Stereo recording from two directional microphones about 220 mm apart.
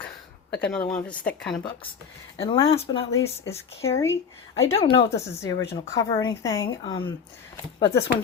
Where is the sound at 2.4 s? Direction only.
25° left (ahead or behind).